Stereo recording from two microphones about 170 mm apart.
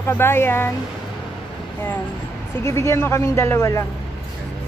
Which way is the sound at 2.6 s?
15° left (ahead or behind).